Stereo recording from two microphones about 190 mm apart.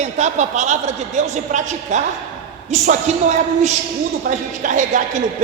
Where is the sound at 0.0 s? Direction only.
35° right (ahead or behind).